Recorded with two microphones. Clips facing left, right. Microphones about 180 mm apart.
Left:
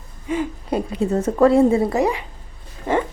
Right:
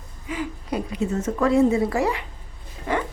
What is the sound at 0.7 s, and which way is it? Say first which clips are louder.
A woman's voice: left 5 dB; 30° left (ahead or behind).